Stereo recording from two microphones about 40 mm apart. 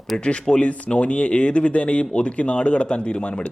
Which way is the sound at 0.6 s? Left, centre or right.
Left.